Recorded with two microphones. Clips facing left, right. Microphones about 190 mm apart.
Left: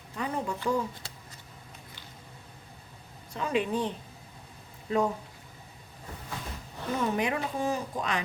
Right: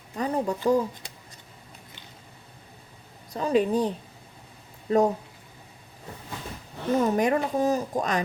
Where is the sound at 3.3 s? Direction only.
40° right (ahead or behind).